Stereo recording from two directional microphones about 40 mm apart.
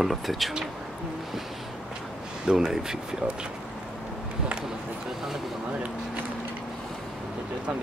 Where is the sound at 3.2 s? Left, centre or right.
Right.